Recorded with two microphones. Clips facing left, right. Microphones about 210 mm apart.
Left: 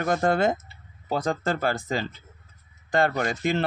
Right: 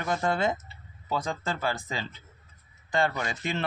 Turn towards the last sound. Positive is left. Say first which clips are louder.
# left 6 dB
turn(degrees=40)  # may be behind; listen again after turning